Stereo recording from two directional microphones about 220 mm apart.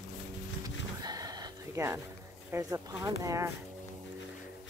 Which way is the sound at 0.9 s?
15° right (ahead or behind).